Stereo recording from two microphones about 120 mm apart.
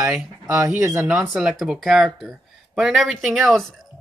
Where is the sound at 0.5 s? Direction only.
25° right (ahead or behind).